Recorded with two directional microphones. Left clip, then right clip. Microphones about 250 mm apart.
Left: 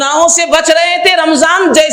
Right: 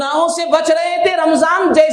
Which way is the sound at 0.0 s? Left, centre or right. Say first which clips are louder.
Left 6 dB; left.